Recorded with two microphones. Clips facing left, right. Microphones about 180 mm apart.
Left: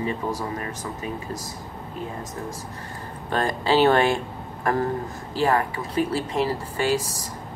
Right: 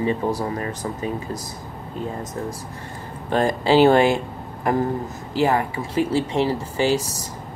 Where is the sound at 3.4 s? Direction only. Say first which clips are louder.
Right 4 dB; 25° right (ahead or behind).